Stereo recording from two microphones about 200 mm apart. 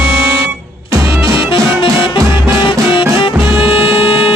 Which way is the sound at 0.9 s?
15° right (ahead or behind).